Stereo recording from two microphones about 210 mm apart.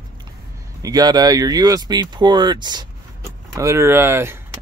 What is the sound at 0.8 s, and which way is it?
Speech, 20° right (ahead or behind).